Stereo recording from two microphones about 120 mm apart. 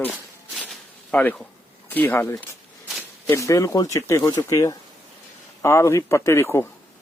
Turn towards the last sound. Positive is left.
turn(degrees=20)  # may be behind; listen again after turning